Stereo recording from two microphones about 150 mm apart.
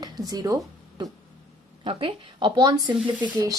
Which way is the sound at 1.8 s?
35° right (ahead or behind).